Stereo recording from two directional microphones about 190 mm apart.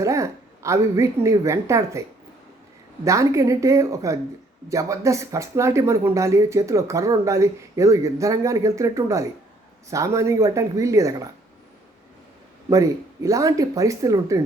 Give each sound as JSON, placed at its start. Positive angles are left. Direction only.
{"t": 0.0, "sound": "a woman's voice", "side_deg": -15}
{"t": 12.7, "sound": "speech", "side_deg": -15}